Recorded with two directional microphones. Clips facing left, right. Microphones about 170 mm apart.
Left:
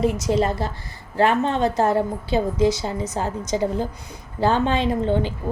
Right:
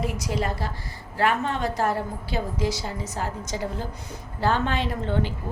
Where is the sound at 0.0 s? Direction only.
25° left (ahead or behind).